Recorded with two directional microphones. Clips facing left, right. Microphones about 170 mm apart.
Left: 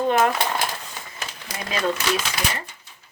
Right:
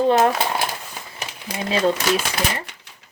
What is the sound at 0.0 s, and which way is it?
Speech, 35° right (ahead or behind).